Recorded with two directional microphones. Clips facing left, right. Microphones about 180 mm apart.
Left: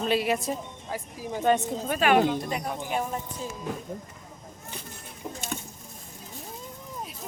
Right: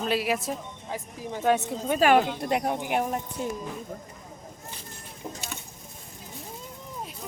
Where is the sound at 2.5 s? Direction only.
65° right (ahead or behind).